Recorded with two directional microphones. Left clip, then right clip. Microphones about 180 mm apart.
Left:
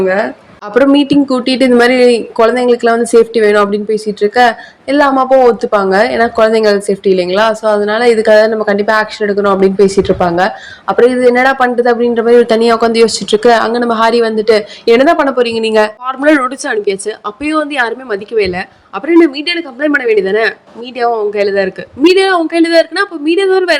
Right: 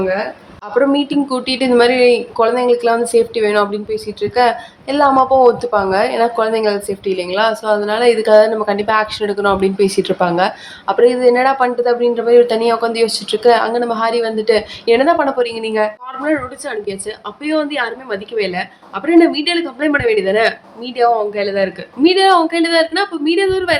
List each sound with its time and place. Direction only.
0.0 s speech: 25° left (ahead or behind)